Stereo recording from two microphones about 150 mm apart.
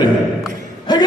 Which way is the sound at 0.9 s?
30° left (ahead or behind).